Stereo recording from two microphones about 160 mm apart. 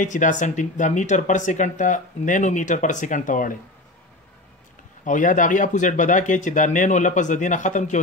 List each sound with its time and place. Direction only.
0.0 s speech: 50° left (ahead or behind)
5.0 s speech: 55° left (ahead or behind)